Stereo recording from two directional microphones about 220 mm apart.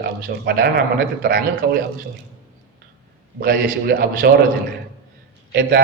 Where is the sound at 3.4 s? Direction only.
45° right (ahead or behind).